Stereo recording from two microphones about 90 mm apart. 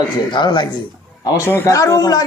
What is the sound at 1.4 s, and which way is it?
Speech, 30° left (ahead or behind).